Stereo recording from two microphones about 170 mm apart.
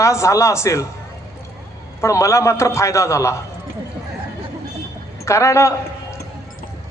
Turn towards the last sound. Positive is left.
turn(degrees=15)  # may be behind; listen again after turning